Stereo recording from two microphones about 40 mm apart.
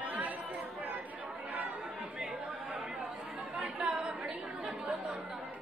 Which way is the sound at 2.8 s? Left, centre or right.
Centre.